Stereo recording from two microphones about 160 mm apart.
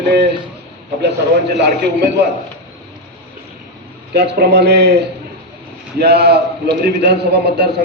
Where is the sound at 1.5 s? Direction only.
90° right.